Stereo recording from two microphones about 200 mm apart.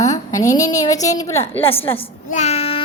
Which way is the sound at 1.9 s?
30° left (ahead or behind).